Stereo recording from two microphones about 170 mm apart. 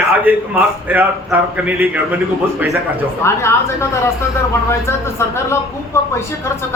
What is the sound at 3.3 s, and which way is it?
Speech, 15° left (ahead or behind).